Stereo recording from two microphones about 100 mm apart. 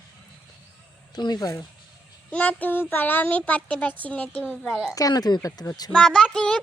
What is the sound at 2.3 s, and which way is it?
Child singing, 15° left (ahead or behind).